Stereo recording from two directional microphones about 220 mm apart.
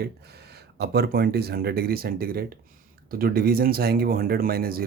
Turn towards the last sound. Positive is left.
turn(degrees=-45)  # may be behind; listen again after turning